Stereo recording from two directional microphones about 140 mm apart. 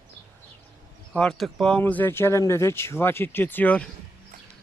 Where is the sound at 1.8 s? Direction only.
15° left (ahead or behind).